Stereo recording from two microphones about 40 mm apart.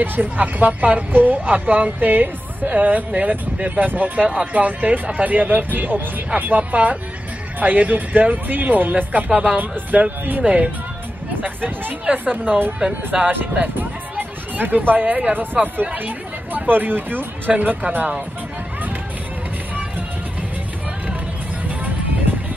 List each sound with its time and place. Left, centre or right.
0.0 s speech: right
3.8 s speech: right
4.2 s speech: right
9.6 s speech: right
10.4 s speech: right
11.4 s speech: right
12.1 s a woman's voice: right
13.1 s speech: centre
13.6 s speech: right
17.5 s speech: right